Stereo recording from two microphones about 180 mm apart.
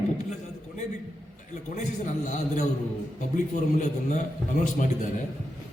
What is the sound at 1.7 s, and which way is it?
A man's voice, 40° left (ahead or behind).